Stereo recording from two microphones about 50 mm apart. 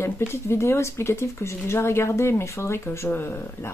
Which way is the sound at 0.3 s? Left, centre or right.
Left.